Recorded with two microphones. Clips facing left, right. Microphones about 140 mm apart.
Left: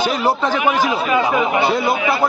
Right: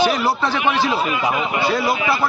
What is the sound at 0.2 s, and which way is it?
Speech, 15° left (ahead or behind).